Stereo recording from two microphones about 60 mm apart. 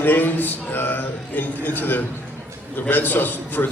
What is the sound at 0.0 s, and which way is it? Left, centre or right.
A man's voice, left.